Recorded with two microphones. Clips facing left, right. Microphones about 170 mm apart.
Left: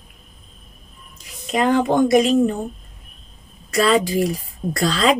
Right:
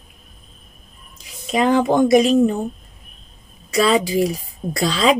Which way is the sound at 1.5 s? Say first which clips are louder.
Right 1 dB; 15° right (ahead or behind).